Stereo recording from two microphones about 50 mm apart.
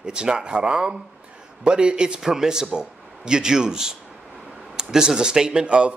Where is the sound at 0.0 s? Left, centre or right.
Centre.